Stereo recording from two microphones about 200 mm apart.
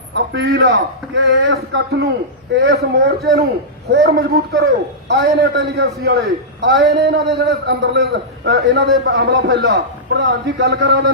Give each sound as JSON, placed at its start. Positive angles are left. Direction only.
{"t": 0.3, "sound": "a man's voice", "side_deg": -60}